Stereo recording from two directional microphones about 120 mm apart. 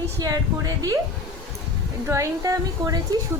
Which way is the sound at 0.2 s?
30° right (ahead or behind).